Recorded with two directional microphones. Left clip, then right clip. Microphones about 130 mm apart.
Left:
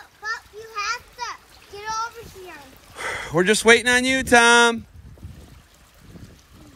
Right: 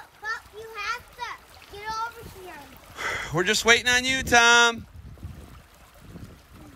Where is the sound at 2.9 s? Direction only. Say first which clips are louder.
Left 4 dB; 25° right (ahead or behind).